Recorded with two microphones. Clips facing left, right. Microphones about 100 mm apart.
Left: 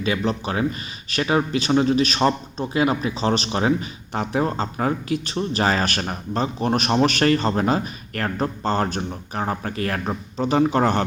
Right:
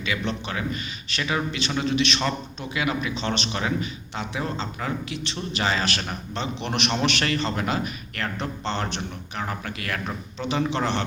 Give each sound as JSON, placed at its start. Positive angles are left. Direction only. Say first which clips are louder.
{"t": 0.0, "sound": "speech", "louder": "left 5 dB", "side_deg": 40}